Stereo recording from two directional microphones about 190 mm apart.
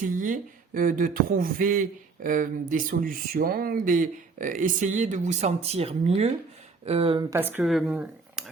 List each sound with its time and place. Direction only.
0.0 s speech: 45° right (ahead or behind); by 8.4 s 5° right (ahead or behind)